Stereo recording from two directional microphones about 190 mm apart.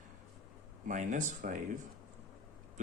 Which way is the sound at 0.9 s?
40° right (ahead or behind).